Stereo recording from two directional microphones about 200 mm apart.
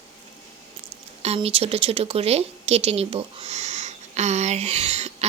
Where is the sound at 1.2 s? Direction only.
30° right (ahead or behind).